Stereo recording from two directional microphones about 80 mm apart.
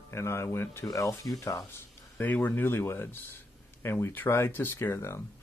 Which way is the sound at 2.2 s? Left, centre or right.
Left.